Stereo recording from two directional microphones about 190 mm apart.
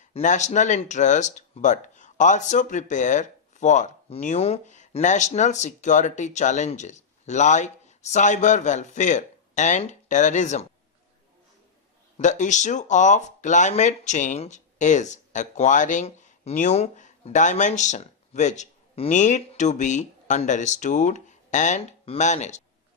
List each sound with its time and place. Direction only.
0.0 s speech: 40° left (ahead or behind)
12.1 s speech: 40° left (ahead or behind)